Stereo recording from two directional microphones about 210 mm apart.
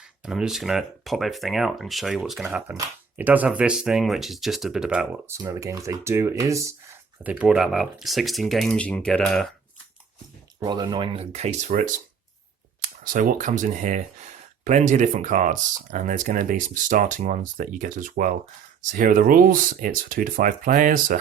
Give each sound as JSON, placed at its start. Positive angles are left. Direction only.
{"t": 0.2, "sound": "speech", "side_deg": -5}
{"t": 5.4, "sound": "speech", "side_deg": -15}
{"t": 10.6, "sound": "speech", "side_deg": -20}
{"t": 12.8, "sound": "speech", "side_deg": -40}